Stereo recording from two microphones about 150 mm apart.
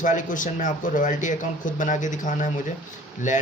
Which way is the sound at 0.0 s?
60° left (ahead or behind).